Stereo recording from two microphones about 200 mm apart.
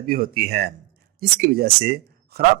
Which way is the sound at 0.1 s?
50° right (ahead or behind).